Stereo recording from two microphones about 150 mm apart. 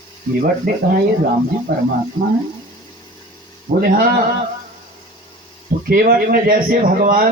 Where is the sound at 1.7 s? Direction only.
90° right.